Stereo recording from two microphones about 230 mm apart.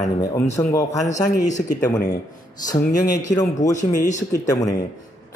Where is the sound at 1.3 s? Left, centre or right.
Left.